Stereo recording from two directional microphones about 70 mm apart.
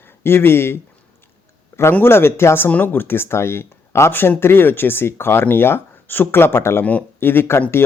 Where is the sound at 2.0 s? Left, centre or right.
Left.